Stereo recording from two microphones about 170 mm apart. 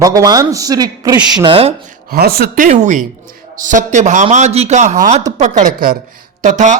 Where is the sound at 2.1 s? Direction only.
65° right (ahead or behind).